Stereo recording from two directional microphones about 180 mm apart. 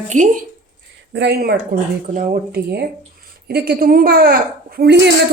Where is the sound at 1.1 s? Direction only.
65° right (ahead or behind).